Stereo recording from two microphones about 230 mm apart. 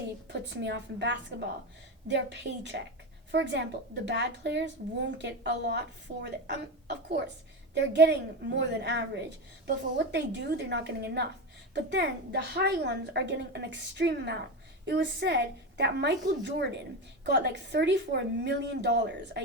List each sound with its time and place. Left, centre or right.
0.3 s a child's voice: right